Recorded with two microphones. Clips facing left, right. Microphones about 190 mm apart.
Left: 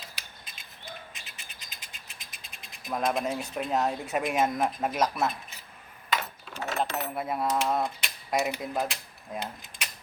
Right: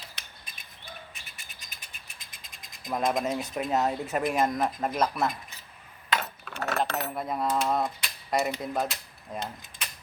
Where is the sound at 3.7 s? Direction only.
5° right (ahead or behind).